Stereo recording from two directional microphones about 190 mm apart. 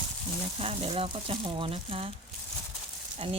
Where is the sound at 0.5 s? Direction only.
30° right (ahead or behind).